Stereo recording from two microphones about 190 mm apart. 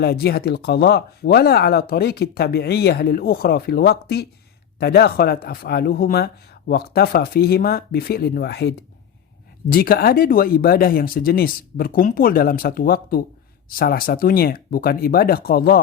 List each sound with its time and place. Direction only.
0.0 s speech: 55° left (ahead or behind)